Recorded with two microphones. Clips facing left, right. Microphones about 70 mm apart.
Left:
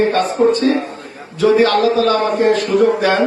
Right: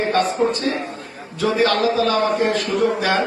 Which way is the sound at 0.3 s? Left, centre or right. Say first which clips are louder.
Left 6 dB; left.